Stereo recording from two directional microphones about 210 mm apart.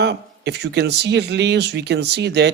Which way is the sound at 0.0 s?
55° right (ahead or behind).